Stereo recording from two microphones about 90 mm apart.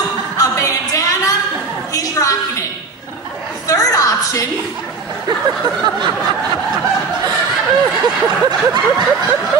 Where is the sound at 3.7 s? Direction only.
40° left (ahead or behind).